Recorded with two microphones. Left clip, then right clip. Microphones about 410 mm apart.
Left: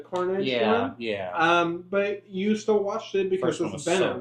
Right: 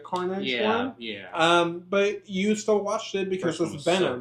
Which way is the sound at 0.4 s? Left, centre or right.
Left.